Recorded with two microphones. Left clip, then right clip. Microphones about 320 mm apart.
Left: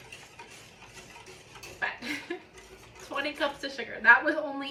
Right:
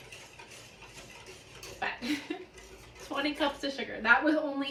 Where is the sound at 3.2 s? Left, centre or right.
Centre.